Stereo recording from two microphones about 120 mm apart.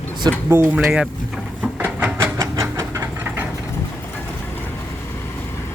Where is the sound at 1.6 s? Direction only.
15° right (ahead or behind).